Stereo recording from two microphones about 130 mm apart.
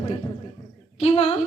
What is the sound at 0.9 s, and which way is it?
Speech, 50° left (ahead or behind).